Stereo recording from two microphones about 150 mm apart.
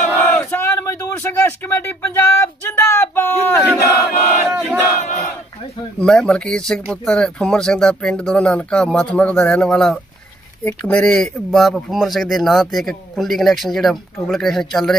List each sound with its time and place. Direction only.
0.2 s a sound: 15° left (ahead or behind)
3.8 s chant: 20° left (ahead or behind)
4.5 s battle cry: centre (ahead or behind)
5.9 s speech: 5° left (ahead or behind)